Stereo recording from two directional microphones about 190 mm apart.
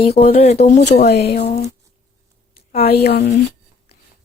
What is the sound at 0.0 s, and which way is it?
Speech, 35° left (ahead or behind).